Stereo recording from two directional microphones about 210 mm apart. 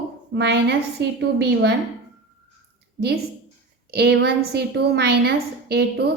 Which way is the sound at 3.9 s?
50° right (ahead or behind).